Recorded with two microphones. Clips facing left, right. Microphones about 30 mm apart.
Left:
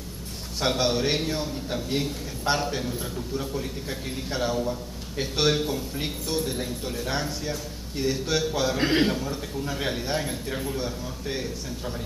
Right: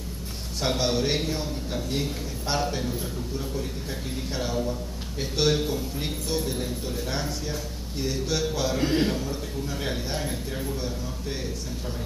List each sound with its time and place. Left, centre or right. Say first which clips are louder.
0.6 s a man's voice: left 1 dB; centre
4.3 s a man's voice: left 2 dB; centre
8.7 s a man's voice: left 1 dB; left
9.1 s a man's voice: left 1 dB; centre